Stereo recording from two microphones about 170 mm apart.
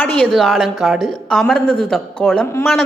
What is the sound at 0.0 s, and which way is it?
A woman's voice, 5° left (ahead or behind).